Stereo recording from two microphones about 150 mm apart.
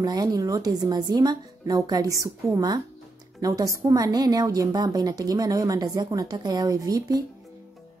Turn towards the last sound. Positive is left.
turn(degrees=-25)  # may be behind; listen again after turning